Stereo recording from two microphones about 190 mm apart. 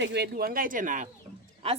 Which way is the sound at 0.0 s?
60° right (ahead or behind).